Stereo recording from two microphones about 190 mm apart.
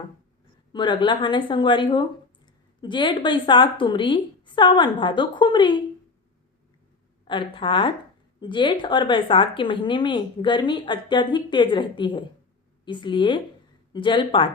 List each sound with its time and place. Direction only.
0.7 s speech: 25° left (ahead or behind)
7.3 s speech: 25° left (ahead or behind)